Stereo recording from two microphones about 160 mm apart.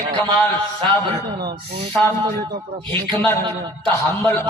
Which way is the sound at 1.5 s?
35° right (ahead or behind).